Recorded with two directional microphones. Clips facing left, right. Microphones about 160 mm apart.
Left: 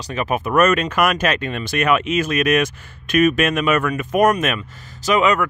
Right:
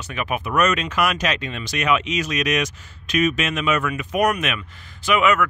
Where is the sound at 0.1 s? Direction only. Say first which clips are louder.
Left 5 dB; 40° left (ahead or behind).